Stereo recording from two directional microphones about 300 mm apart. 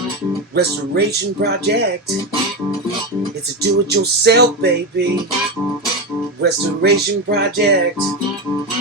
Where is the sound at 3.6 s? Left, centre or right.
Right.